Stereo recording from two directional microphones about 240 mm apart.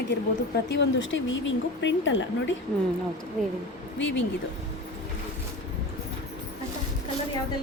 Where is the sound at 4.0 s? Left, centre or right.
Left.